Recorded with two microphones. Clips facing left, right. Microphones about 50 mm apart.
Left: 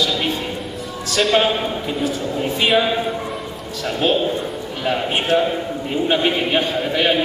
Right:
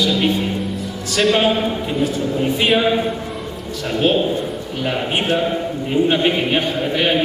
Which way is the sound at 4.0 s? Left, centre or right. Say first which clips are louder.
Right 2 dB; centre.